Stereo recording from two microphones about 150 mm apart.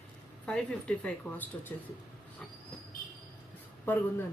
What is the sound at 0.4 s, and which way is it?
Speech, 5° left (ahead or behind).